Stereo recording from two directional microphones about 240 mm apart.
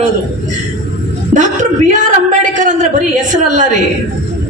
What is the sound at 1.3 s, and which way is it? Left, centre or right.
Speech, centre.